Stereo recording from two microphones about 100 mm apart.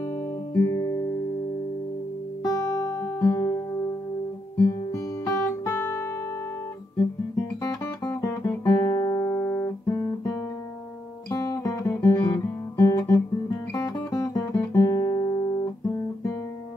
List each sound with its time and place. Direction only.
0.6 s guitar: 30° left (ahead or behind)
2.4 s guitar: 40° left (ahead or behind)
4.6 s guitar: 30° left (ahead or behind)
7.3 s guitar: 35° left (ahead or behind)
11.2 s guitar: 35° left (ahead or behind)
13.7 s music: 30° left (ahead or behind)
14.6 s guitar: 30° left (ahead or behind)